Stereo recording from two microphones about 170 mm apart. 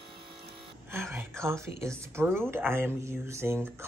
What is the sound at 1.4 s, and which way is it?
Speech, 15° right (ahead or behind).